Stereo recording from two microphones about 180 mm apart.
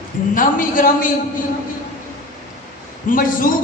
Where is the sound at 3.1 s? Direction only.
50° left (ahead or behind).